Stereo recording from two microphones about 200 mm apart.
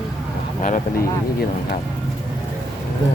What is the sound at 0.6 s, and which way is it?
Speech, 40° left (ahead or behind).